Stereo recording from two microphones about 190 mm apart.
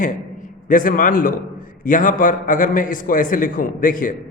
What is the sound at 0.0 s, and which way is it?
A man's voice, 45° left (ahead or behind).